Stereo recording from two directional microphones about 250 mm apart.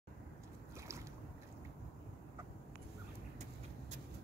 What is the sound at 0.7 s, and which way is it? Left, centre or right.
Boat, centre.